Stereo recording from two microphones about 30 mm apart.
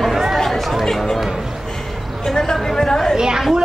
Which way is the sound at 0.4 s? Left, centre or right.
Centre.